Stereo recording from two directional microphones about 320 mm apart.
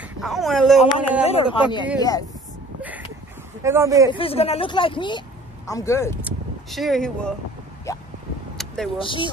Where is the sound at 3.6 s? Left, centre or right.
Centre.